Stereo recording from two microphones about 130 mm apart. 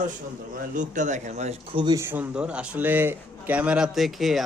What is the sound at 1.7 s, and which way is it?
Speech, 35° right (ahead or behind).